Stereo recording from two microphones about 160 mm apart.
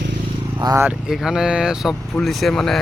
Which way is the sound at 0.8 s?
5° right (ahead or behind).